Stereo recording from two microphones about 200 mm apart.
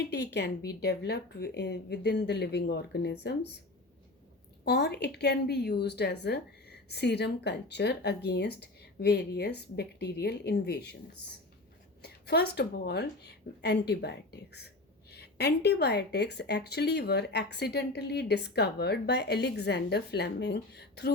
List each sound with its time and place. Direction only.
0.1 s a woman's voice: 60° left (ahead or behind)
4.6 s a woman's voice: 55° left (ahead or behind)